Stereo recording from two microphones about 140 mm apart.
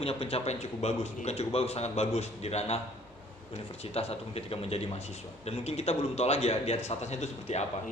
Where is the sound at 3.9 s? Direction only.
45° left (ahead or behind).